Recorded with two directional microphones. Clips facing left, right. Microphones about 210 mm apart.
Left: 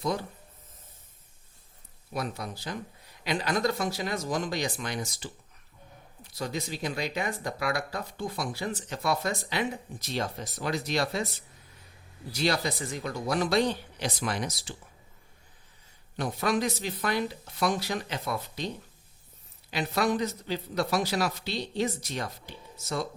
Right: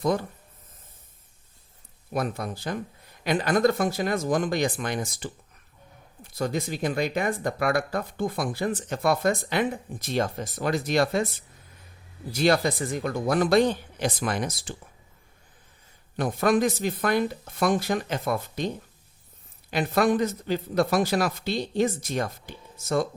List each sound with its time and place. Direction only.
2.1 s speech: 50° right (ahead or behind)
12.3 s speech: 50° right (ahead or behind)
16.1 s speech: 50° right (ahead or behind)
19.7 s speech: 50° right (ahead or behind)